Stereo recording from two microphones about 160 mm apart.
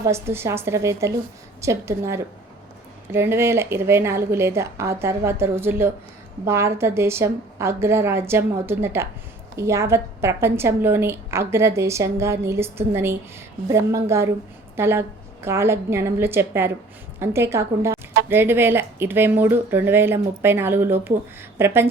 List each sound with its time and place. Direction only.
0.0 s a woman's voice: 15° right (ahead or behind)